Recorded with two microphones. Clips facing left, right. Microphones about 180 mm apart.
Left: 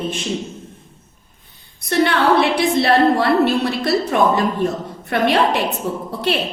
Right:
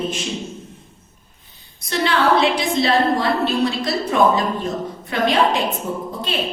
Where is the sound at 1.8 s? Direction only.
60° left (ahead or behind).